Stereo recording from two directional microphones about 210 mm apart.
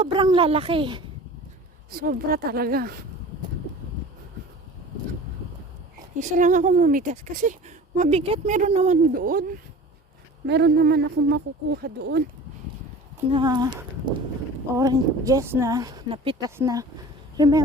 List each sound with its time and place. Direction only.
0.0 s speech: 25° right (ahead or behind)
1.9 s speech: 45° right (ahead or behind)
6.1 s speech: 35° right (ahead or behind)
10.4 s speech: 55° right (ahead or behind)
13.3 s speech: 20° right (ahead or behind)